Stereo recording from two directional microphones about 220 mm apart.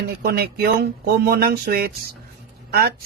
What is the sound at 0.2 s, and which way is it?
Speech, 45° right (ahead or behind).